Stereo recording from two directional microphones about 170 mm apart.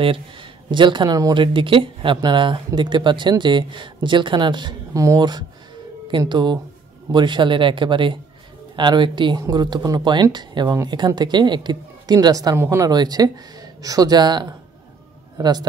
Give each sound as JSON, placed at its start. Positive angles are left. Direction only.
{"t": 0.0, "sound": "a woman's voice", "side_deg": -30}